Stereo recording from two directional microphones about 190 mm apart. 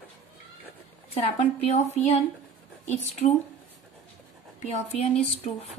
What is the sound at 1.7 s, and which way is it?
Speech, 35° left (ahead or behind).